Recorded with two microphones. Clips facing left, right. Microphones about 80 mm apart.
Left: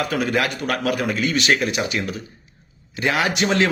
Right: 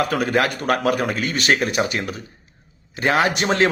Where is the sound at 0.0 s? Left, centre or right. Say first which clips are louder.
Right 2 dB; right.